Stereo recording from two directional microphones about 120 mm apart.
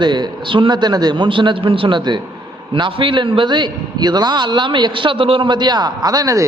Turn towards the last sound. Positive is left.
turn(degrees=-30)  # may be behind; listen again after turning